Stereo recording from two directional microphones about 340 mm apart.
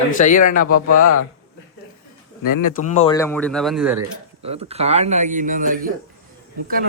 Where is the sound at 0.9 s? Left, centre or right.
Left.